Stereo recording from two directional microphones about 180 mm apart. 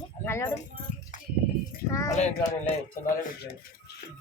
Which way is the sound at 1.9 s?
15° left (ahead or behind).